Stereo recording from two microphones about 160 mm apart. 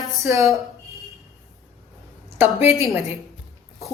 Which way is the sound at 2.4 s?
15° right (ahead or behind).